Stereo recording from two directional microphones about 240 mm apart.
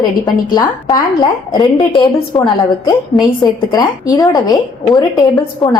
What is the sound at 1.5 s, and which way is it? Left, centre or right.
Speech, centre.